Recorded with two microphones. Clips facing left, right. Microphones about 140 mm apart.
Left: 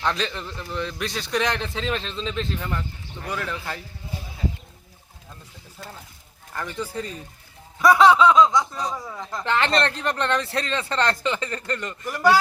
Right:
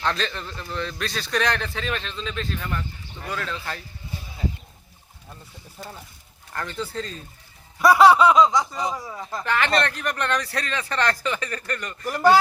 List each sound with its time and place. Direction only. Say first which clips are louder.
0.0 s speech: even; 15° left (ahead or behind)
6.5 s speech: even; 10° left (ahead or behind)
7.8 s laughter: right 1 dB; 5° right (ahead or behind)
8.7 s speech: right 1 dB; 10° right (ahead or behind)
9.4 s speech: left 1 dB; 25° left (ahead or behind)